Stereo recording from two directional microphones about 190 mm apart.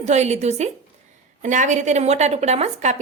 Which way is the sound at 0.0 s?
35° right (ahead or behind).